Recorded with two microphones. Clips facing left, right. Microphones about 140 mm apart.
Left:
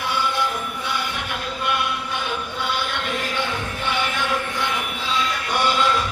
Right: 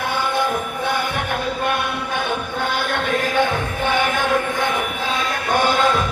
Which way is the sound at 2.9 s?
50° right (ahead or behind).